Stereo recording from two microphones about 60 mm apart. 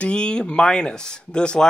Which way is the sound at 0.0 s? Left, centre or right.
Centre.